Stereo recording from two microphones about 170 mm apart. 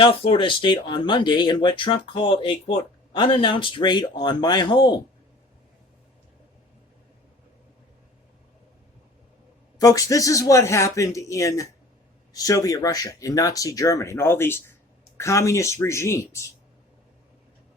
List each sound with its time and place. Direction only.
0.0 s speech: 30° left (ahead or behind)
9.7 s speech: 20° left (ahead or behind)